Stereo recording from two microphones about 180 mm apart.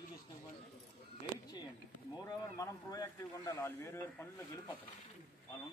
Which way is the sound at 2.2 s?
20° left (ahead or behind).